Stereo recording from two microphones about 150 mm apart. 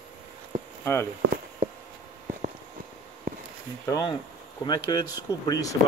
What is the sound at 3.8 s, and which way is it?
Speech, 25° left (ahead or behind).